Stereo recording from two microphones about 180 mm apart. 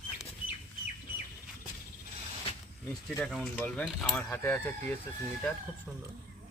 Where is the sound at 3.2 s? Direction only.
Centre (ahead or behind).